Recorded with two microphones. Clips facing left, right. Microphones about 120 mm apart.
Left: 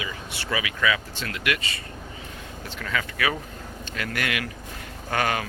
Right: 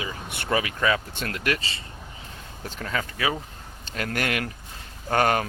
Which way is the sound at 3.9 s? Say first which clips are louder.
Right 2 dB; 40° right (ahead or behind).